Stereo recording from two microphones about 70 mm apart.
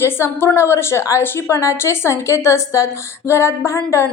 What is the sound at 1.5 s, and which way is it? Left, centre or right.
A woman's voice, left.